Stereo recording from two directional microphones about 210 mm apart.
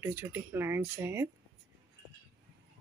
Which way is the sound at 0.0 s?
15° right (ahead or behind).